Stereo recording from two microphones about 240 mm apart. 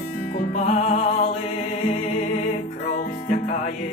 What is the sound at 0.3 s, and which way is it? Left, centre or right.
Music, left.